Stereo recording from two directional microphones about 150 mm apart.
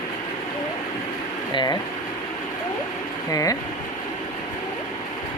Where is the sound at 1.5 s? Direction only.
25° left (ahead or behind).